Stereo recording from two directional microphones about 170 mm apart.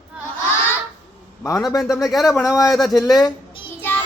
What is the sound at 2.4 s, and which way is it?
Speech, 20° left (ahead or behind).